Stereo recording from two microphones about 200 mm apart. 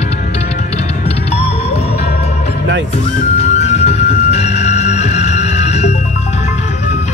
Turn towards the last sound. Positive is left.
turn(degrees=35)  # may be behind; listen again after turning